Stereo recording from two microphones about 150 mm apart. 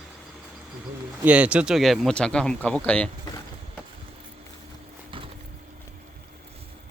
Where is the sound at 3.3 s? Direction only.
25° left (ahead or behind).